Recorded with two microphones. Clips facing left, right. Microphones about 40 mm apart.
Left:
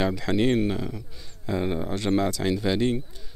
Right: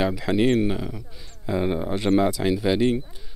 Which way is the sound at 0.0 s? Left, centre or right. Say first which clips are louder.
Right 2 dB; centre.